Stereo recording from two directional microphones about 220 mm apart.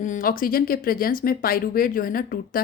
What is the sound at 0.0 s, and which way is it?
Speech, 35° left (ahead or behind).